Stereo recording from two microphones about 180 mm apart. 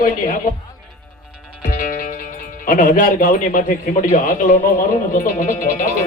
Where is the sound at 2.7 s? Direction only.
50° left (ahead or behind).